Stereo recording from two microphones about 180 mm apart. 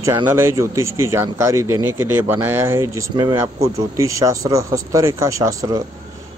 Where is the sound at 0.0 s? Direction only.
15° right (ahead or behind).